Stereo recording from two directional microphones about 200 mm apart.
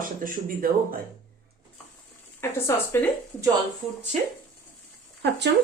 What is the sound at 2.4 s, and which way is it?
Speech, 15° left (ahead or behind).